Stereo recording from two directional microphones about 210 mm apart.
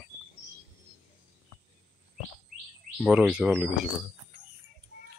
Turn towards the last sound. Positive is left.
turn(degrees=-5)  # may be behind; listen again after turning